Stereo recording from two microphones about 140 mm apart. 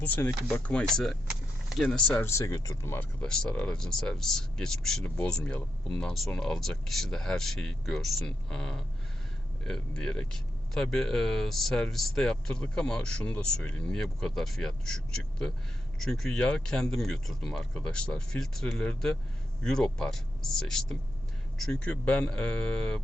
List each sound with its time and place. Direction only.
0.0 s speech: 20° left (ahead or behind)
0.5 s speech: 10° left (ahead or behind)
2.2 s speech: 20° left (ahead or behind); by 23.0 s 5° left (ahead or behind)